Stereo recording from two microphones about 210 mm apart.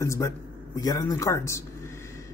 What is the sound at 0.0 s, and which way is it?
A man's voice, 15° left (ahead or behind).